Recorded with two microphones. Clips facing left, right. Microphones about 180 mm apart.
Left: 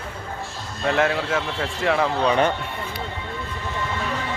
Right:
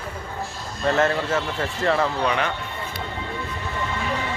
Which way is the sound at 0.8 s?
Centre (ahead or behind).